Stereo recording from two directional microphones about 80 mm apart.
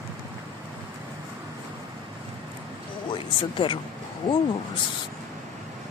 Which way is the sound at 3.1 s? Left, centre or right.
Left.